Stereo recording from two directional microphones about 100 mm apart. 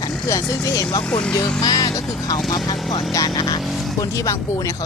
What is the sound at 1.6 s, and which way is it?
Vehicle, 40° left (ahead or behind).